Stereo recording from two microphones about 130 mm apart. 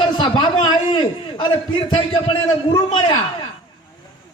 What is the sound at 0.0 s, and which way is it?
A man's voice, 40° left (ahead or behind).